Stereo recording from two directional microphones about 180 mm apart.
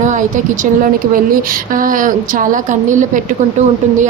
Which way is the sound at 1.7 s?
50° right (ahead or behind).